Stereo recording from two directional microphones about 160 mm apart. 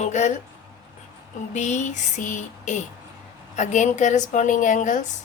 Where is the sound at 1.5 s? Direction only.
50° left (ahead or behind).